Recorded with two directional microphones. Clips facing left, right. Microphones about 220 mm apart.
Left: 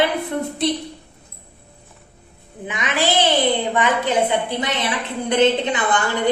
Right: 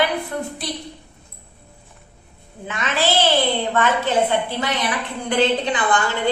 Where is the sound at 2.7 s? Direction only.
15° left (ahead or behind).